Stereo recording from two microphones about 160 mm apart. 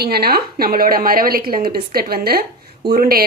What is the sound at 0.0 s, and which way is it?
A woman's voice, 80° right.